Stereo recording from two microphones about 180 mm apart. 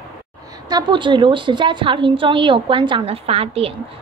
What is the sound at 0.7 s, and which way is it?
A woman's voice, 25° right (ahead or behind).